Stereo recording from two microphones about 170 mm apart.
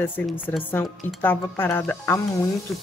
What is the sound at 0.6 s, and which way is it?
Speech, 10° left (ahead or behind).